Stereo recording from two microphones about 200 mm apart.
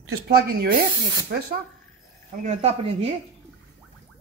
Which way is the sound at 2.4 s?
35° right (ahead or behind).